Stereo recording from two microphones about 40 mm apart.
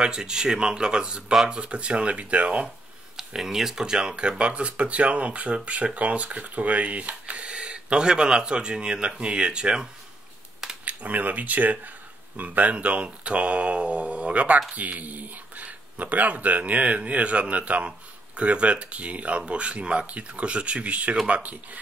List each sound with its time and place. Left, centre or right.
0.0 s speech: centre
3.2 s speech: centre
3.8 s speech: centre
10.9 s speech: right
16.8 s speech: right